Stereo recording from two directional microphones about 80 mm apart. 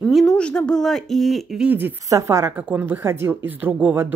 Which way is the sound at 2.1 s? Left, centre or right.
Right.